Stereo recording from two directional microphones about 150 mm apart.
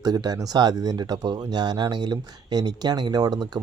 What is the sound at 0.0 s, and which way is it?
Speech, 25° right (ahead or behind).